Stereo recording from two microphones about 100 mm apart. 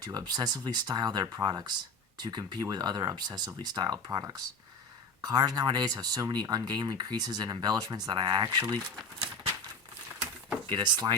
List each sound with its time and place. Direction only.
0.0 s speech: 40° right (ahead or behind)
10.7 s speech: 50° right (ahead or behind)